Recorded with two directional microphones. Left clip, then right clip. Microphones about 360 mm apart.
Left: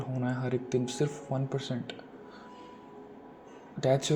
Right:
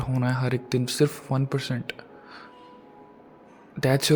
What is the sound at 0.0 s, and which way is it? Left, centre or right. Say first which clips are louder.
A man's voice: right 6 dB; right.